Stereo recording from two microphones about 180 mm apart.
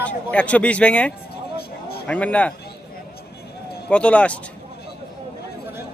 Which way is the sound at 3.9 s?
5° left (ahead or behind).